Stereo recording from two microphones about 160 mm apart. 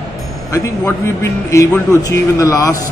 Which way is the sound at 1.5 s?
20° left (ahead or behind).